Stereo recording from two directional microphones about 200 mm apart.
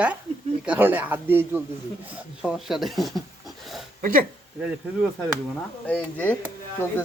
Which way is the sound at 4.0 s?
45° right (ahead or behind).